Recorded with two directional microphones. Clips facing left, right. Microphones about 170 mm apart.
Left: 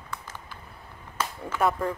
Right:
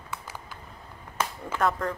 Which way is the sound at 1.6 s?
5° left (ahead or behind).